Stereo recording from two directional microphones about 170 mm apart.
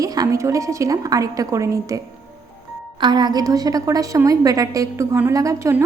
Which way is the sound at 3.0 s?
25° right (ahead or behind).